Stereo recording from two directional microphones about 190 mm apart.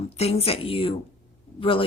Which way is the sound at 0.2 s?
30° left (ahead or behind).